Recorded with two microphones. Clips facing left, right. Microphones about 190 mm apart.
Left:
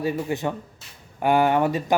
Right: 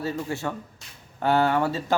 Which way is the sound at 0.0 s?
15° left (ahead or behind).